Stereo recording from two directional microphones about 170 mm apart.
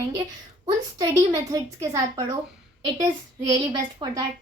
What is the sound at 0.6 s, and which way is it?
A woman's voice, 20° right (ahead or behind).